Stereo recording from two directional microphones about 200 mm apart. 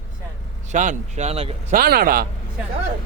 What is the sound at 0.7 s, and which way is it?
Speech, 35° right (ahead or behind).